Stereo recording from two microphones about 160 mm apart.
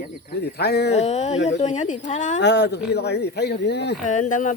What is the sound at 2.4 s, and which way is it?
Speech, 90° left.